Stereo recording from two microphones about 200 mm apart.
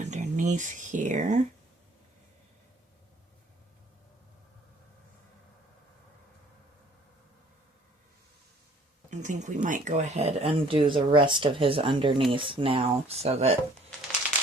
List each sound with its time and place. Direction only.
0.0 s speech: 35° right (ahead or behind)
9.0 s speech: 40° right (ahead or behind)